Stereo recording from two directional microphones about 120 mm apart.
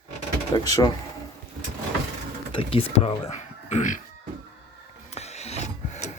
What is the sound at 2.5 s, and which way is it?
Speech, 50° left (ahead or behind).